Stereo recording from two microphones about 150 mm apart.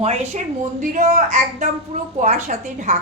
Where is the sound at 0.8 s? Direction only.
55° right (ahead or behind).